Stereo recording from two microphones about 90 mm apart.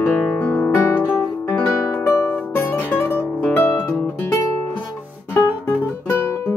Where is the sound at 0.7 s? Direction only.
25° left (ahead or behind).